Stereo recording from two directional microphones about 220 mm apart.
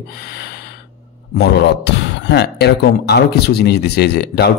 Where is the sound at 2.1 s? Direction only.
50° left (ahead or behind).